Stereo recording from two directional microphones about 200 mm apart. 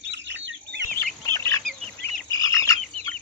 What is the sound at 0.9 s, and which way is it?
Chicken, 10° left (ahead or behind).